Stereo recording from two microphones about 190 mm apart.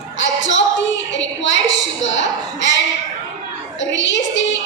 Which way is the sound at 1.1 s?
75° left (ahead or behind).